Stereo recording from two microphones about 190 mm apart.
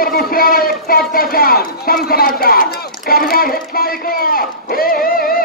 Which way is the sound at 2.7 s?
50° left (ahead or behind).